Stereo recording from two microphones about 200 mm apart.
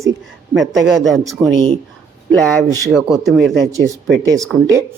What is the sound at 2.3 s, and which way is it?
Speech, centre (ahead or behind).